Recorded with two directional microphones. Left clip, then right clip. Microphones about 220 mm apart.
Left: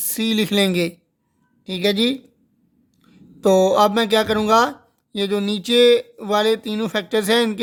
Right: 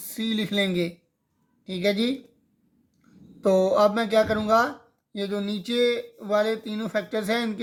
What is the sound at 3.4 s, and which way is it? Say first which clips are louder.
Speech: left 5 dB; 35° left (ahead or behind).